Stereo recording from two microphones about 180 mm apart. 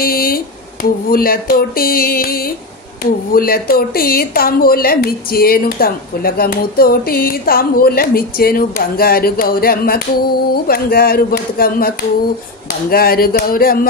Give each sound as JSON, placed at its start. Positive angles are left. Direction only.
{"t": 0.0, "sound": "a woman's voice", "side_deg": 55}
{"t": 12.9, "sound": "a woman's voice", "side_deg": 55}